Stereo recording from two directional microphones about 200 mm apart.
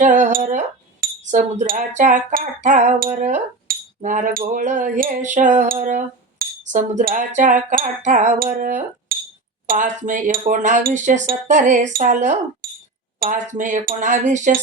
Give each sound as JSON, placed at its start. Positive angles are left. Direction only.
{"t": 0.0, "sound": "speech", "side_deg": -40}
{"t": 1.0, "sound": "wind chime", "side_deg": -40}
{"t": 12.6, "sound": "a sound", "side_deg": -45}
{"t": 13.1, "sound": "wind chime", "side_deg": -45}